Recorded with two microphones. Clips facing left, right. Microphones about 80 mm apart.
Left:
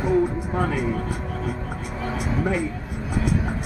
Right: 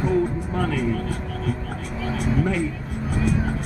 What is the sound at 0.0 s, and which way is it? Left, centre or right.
Speech, centre.